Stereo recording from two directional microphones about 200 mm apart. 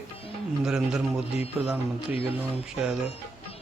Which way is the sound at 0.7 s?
5° right (ahead or behind).